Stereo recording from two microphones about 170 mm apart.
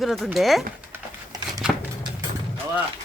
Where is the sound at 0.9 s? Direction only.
20° right (ahead or behind).